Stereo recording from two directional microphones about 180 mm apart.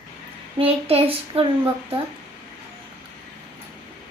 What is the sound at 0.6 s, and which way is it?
Child singing, 30° right (ahead or behind).